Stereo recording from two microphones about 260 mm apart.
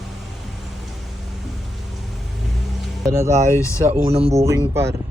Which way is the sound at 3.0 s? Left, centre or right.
Centre.